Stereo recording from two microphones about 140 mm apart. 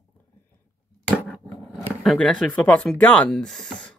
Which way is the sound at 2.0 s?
5° left (ahead or behind).